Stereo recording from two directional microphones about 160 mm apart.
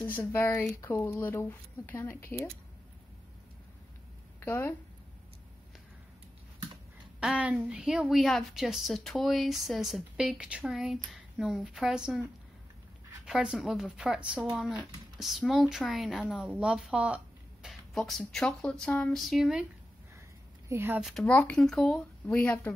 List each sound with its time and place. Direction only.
0.0 s speech: 10° left (ahead or behind)
4.4 s speech: 15° left (ahead or behind)
7.2 s speech: 5° right (ahead or behind)
20.6 s a woman's voice: 15° right (ahead or behind)
21.0 s speech: 5° left (ahead or behind)